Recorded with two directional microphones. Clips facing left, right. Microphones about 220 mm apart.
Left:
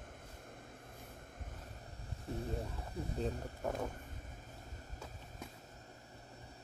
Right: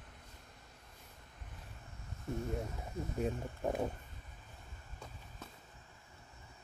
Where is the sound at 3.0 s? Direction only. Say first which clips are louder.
Right 1 dB; 35° left (ahead or behind).